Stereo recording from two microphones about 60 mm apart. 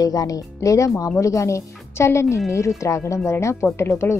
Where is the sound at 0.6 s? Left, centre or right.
Left.